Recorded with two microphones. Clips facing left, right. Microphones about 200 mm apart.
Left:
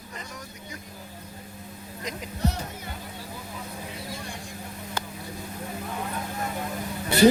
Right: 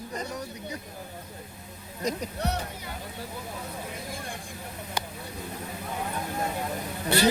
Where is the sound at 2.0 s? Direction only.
45° right (ahead or behind).